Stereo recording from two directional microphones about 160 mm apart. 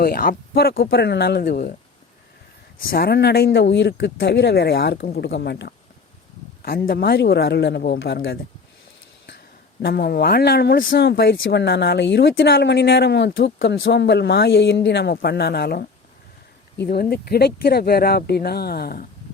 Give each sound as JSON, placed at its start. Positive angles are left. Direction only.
{"t": 0.0, "sound": "speech", "side_deg": 65}
{"t": 0.8, "sound": "speech", "side_deg": 85}
{"t": 2.8, "sound": "speech", "side_deg": 70}
{"t": 6.6, "sound": "speech", "side_deg": 70}
{"t": 9.8, "sound": "speech", "side_deg": 80}